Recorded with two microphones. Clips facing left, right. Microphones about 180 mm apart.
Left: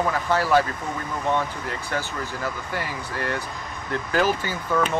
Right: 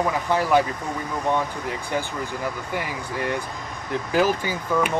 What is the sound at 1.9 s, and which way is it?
Speech, 15° right (ahead or behind).